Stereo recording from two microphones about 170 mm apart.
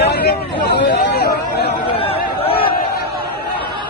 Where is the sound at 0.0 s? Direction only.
75° left (ahead or behind).